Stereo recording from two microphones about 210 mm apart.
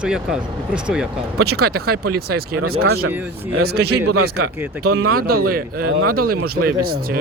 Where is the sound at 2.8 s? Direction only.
90° right.